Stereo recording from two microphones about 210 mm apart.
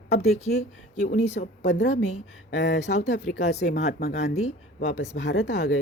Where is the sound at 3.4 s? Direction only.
35° left (ahead or behind).